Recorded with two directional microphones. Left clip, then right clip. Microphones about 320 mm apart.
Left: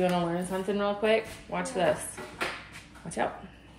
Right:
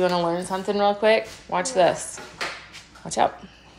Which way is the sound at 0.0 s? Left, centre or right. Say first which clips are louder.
Right 6 dB; centre.